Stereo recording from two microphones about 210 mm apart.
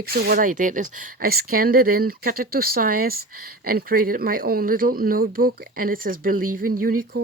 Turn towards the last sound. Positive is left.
turn(degrees=-45)  # may be behind; listen again after turning